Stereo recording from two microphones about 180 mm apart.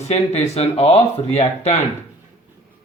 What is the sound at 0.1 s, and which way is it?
Speech, 35° left (ahead or behind).